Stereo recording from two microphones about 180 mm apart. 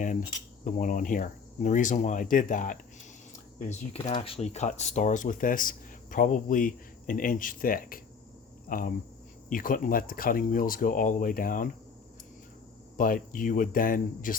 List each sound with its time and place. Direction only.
0.6 s speech: 45° left (ahead or behind)
13.0 s speech: 50° left (ahead or behind)